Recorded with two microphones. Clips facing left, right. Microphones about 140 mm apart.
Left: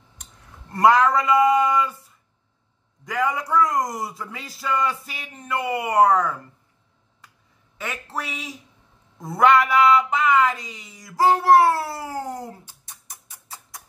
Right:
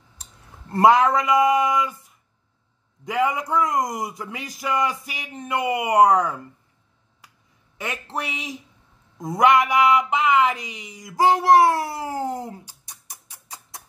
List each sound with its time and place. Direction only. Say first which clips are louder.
0.2 s a sound: right 1 dB; 25° right (ahead or behind)
3.1 s speech: right 1 dB; 20° right (ahead or behind)
7.7 s speech: right 1 dB; 15° right (ahead or behind)
12.6 s music: even; 10° right (ahead or behind)